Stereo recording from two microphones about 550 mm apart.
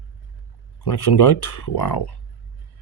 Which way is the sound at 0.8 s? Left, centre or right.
Left.